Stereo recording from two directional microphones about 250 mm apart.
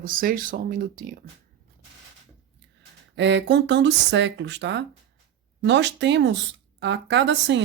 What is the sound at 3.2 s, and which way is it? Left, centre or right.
Speech, right.